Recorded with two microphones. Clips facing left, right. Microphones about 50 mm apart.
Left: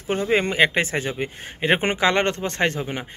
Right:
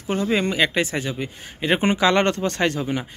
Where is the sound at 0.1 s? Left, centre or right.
Left.